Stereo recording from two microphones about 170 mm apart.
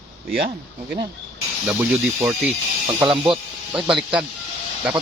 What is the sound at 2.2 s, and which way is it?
Speech, 10° right (ahead or behind).